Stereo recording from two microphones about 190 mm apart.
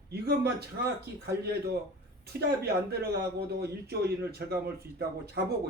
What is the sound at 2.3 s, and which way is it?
Speech, 55° right (ahead or behind).